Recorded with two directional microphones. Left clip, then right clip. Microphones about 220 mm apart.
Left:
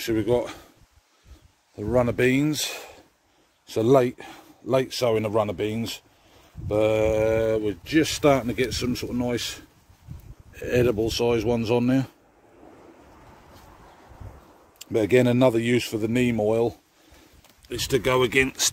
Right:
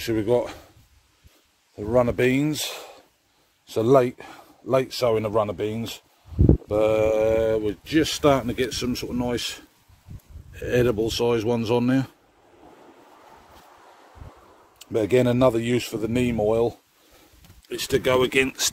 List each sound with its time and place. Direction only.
0.0 s speech: 10° left (ahead or behind)
1.8 s speech: 10° left (ahead or behind)
14.9 s speech: 25° left (ahead or behind); by 18.7 s 5° left (ahead or behind)